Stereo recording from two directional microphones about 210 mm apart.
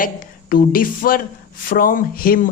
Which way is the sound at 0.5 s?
40° left (ahead or behind).